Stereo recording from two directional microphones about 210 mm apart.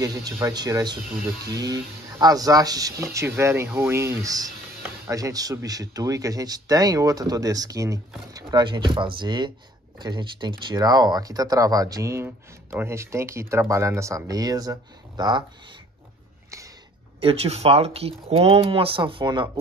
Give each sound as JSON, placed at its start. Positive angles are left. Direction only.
{"t": 0.0, "sound": "speech", "side_deg": -15}
{"t": 17.2, "sound": "speech", "side_deg": -25}